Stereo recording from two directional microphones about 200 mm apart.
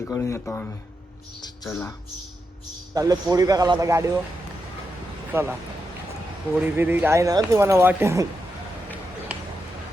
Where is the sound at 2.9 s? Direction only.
20° right (ahead or behind).